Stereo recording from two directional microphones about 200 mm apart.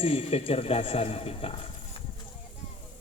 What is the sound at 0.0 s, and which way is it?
A man's voice, 30° left (ahead or behind).